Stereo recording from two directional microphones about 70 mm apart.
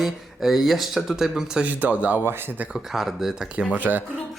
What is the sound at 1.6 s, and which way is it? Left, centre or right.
Speech, right.